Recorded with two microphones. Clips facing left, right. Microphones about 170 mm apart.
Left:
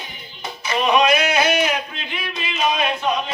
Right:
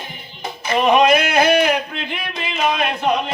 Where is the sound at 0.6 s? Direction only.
55° right (ahead or behind).